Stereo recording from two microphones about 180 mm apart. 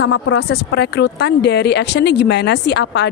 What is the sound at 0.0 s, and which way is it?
Speech, 85° left.